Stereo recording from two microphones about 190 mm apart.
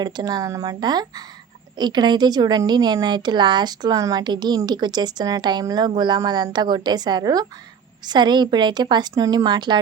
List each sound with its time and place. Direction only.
0.0 s a woman's voice: 20° right (ahead or behind)